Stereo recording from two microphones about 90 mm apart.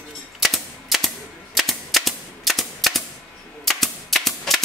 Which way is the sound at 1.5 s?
Centre (ahead or behind).